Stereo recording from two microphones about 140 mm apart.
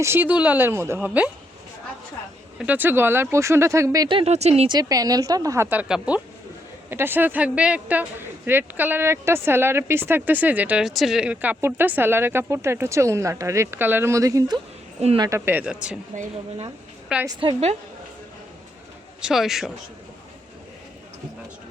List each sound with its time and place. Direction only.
0.0 s speech: 15° right (ahead or behind)
2.6 s speech: 10° right (ahead or behind)
4.1 s speech: 45° right (ahead or behind)
4.7 s a woman's voice: 25° right (ahead or behind)
15.4 s speech: 10° right (ahead or behind)
17.1 s a man's voice: 5° right (ahead or behind)
17.4 s speech: 50° right (ahead or behind)
19.2 s a man's voice: centre (ahead or behind)